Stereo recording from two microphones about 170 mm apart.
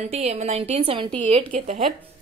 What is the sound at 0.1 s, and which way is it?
A woman's voice, 40° right (ahead or behind).